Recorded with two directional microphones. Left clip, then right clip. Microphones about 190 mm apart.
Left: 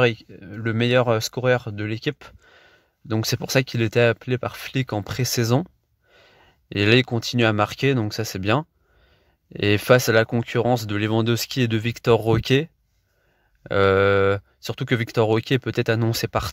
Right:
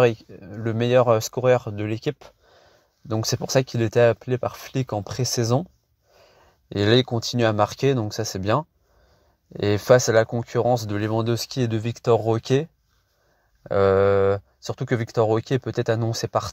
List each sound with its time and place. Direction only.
0.0 s speech: 15° left (ahead or behind)
6.1 s a sound: 15° left (ahead or behind)
7.2 s speech: 15° left (ahead or behind)
9.8 s speech: 20° left (ahead or behind)
13.7 s speech: 20° left (ahead or behind)